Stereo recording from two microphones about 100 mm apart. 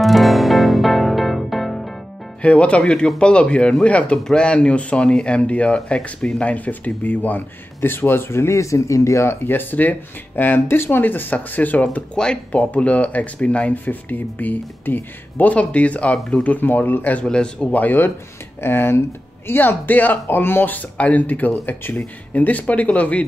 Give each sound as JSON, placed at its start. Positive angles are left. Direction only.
{"t": 0.0, "sound": "music", "side_deg": 0}
{"t": 2.4, "sound": "speech", "side_deg": 10}